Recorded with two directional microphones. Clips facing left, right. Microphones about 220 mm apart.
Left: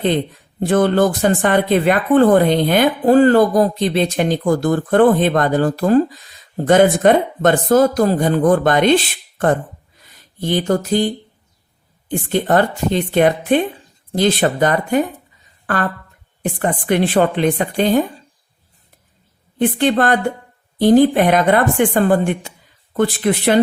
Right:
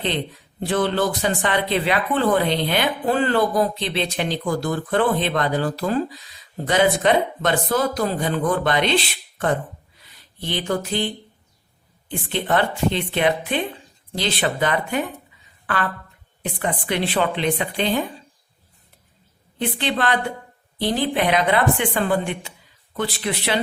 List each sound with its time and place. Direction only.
0.6 s speech: 50° left (ahead or behind)
19.5 s speech: 50° left (ahead or behind)